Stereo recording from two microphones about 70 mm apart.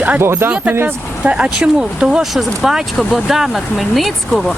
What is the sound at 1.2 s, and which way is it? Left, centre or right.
Speech, centre.